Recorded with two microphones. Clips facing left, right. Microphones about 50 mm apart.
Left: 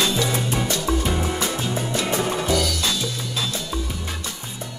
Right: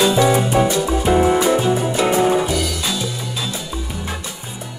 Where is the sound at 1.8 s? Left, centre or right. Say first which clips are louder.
Right 7 dB; centre.